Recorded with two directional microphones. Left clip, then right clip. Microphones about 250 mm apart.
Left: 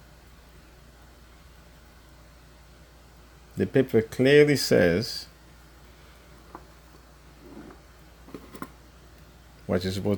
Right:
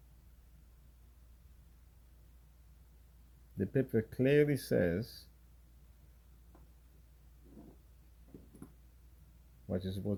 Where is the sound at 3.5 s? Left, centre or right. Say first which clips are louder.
Left 11 dB; centre.